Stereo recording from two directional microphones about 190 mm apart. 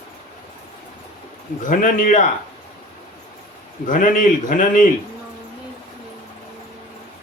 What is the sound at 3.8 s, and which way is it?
A man's voice, 45° left (ahead or behind).